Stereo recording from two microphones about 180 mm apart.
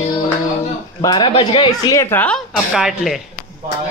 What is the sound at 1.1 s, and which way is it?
Speech, 30° left (ahead or behind).